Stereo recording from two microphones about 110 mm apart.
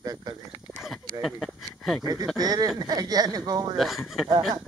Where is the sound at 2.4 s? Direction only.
35° right (ahead or behind).